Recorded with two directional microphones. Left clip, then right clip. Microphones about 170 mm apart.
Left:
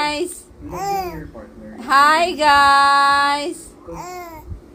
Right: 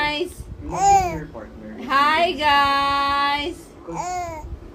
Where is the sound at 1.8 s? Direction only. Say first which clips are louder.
Left 4 dB; 45° left (ahead or behind).